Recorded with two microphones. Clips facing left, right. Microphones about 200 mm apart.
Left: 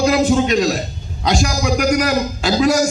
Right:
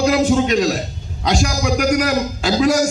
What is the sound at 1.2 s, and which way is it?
Speech, 85° right.